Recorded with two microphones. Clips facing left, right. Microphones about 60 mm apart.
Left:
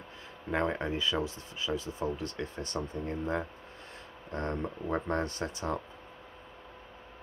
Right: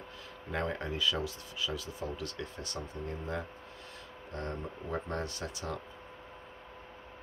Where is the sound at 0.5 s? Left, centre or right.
Left.